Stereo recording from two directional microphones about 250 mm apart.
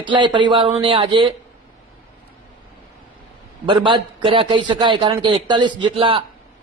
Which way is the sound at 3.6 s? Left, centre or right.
Centre.